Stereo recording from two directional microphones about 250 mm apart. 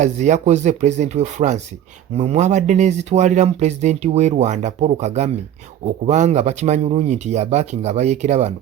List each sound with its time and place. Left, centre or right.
0.0 s speech: right